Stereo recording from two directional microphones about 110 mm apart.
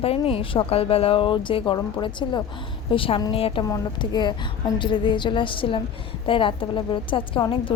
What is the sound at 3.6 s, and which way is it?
A woman's voice, 40° left (ahead or behind).